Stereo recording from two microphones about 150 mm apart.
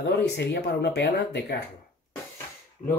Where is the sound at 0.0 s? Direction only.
90° left.